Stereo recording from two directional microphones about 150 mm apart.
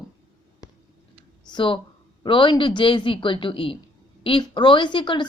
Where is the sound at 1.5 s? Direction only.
35° left (ahead or behind).